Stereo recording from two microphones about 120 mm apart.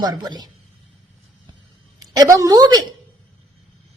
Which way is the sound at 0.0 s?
35° right (ahead or behind).